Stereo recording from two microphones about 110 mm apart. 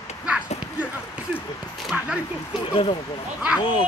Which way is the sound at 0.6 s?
10° right (ahead or behind).